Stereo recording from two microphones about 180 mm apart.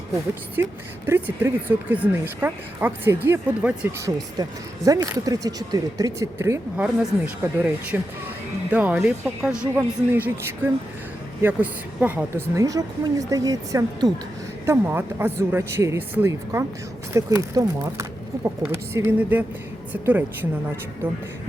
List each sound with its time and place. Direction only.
0.5 s speech: 15° right (ahead or behind)